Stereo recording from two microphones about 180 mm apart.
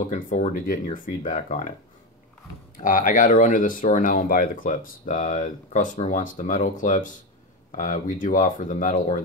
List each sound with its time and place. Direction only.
0.1 s speech: 45° left (ahead or behind)
2.8 s speech: 50° left (ahead or behind)